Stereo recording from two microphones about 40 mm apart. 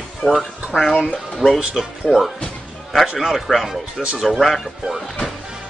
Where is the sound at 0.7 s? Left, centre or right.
Right.